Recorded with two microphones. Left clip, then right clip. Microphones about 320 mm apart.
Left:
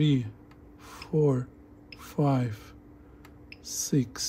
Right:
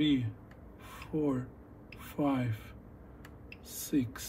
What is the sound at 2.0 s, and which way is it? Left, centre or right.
Speech, left.